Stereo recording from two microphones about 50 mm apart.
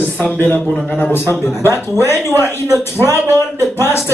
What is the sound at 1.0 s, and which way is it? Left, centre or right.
A man's voice, left.